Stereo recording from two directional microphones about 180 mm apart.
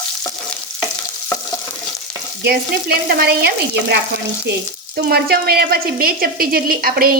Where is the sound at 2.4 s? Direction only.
60° right (ahead or behind).